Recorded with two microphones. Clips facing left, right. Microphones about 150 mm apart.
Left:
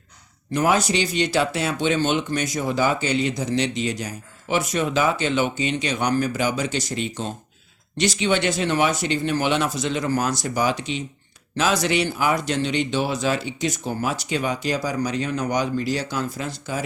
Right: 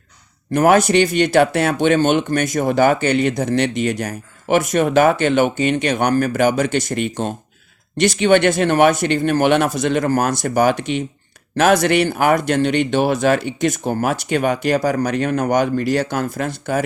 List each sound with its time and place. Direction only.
0.5 s speech: 55° right (ahead or behind)